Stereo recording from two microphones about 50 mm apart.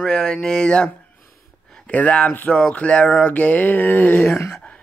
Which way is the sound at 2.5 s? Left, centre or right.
Left.